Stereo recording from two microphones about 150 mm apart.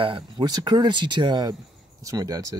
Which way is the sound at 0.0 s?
35° right (ahead or behind).